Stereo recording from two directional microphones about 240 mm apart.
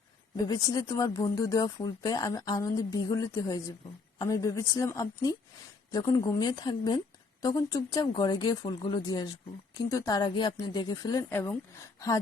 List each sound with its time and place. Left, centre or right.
0.4 s speech: centre